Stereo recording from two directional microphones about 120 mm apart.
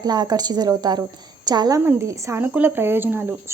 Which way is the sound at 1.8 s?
20° right (ahead or behind).